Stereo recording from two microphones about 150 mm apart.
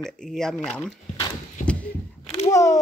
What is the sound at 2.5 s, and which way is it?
Speech, 20° left (ahead or behind).